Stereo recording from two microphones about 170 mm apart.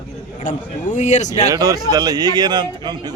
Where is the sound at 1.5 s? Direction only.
20° right (ahead or behind).